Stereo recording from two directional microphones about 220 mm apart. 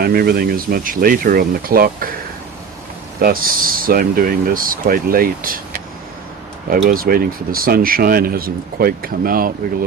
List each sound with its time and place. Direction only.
0.0 s speech: 45° right (ahead or behind)
3.2 s speech: 40° right (ahead or behind)
6.7 s speech: 40° right (ahead or behind)